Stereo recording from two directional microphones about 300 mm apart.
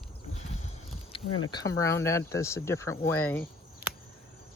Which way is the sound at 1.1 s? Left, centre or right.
Centre.